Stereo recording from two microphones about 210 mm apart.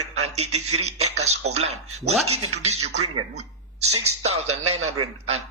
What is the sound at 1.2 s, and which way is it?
A man's voice, 30° right (ahead or behind).